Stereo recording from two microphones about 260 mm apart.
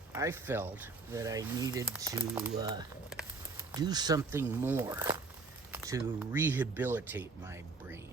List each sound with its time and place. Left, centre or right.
0.1 s speech: centre